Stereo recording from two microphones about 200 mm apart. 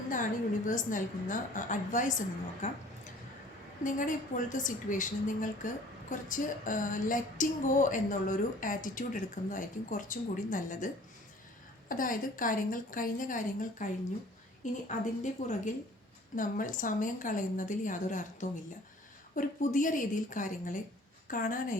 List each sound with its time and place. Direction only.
0.1 s a woman's voice: 40° left (ahead or behind)
3.8 s a woman's voice: 40° left (ahead or behind)